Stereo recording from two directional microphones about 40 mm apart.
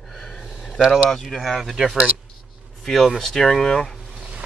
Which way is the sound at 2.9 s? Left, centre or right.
Centre.